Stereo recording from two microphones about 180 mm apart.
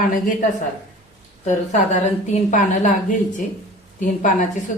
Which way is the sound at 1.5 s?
40° left (ahead or behind).